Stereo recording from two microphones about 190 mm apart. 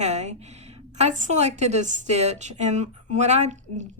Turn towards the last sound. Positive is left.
turn(degrees=-35)  # may be behind; listen again after turning